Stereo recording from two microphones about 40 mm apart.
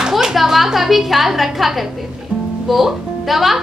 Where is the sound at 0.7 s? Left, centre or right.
Centre.